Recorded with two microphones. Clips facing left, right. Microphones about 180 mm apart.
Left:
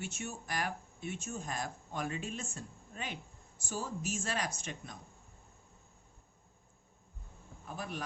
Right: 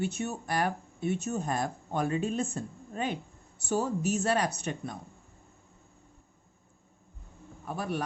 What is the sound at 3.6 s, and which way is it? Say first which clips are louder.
Speech: right 10 dB; 65° right (ahead or behind).